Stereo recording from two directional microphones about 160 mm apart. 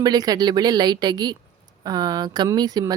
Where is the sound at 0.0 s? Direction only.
25° right (ahead or behind).